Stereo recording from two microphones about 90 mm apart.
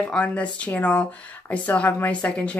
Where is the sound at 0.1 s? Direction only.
15° left (ahead or behind).